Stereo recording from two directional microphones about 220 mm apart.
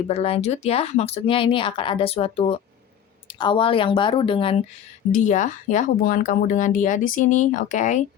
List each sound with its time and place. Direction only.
0.1 s speech: 25° left (ahead or behind)
5.1 s speech: 35° left (ahead or behind)